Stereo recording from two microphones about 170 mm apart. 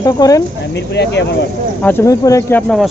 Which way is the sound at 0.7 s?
90° left.